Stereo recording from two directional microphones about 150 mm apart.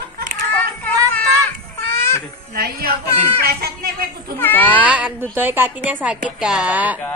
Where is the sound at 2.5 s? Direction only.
85° right.